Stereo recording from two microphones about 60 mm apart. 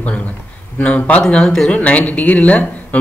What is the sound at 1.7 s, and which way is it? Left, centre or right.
Speech, left.